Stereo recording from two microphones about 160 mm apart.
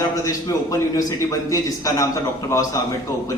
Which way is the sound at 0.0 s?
20° left (ahead or behind).